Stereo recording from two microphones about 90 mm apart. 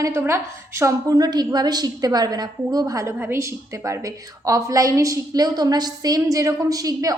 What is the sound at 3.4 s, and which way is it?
A woman's voice, 35° right (ahead or behind).